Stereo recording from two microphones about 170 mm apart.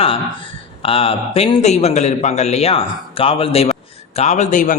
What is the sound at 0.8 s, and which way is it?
A man's voice, 35° left (ahead or behind).